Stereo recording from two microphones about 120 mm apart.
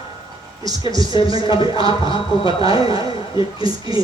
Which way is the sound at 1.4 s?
40° left (ahead or behind).